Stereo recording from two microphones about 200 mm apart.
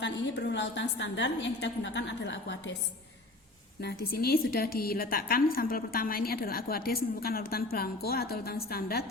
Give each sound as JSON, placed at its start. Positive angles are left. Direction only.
{"t": 0.0, "sound": "a woman's voice", "side_deg": 60}
{"t": 3.8, "sound": "a woman's voice", "side_deg": 55}